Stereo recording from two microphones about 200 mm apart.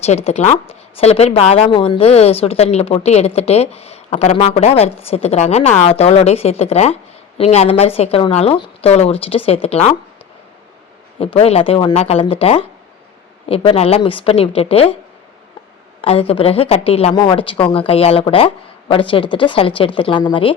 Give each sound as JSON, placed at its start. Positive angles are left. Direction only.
{"t": 0.0, "sound": "a woman's voice", "side_deg": 30}
{"t": 11.2, "sound": "a woman's voice", "side_deg": 30}
{"t": 16.0, "sound": "a woman's voice", "side_deg": 30}